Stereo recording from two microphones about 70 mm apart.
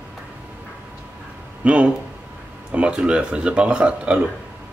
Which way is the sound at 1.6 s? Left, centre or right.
Centre.